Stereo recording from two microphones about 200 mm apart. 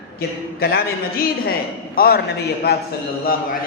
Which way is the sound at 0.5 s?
50° left (ahead or behind).